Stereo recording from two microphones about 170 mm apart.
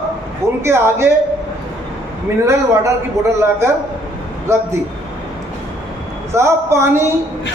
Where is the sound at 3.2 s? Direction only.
15° right (ahead or behind).